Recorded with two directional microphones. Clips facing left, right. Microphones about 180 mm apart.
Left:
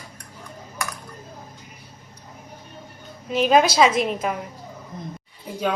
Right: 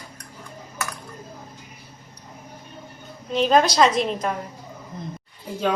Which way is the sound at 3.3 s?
5° left (ahead or behind).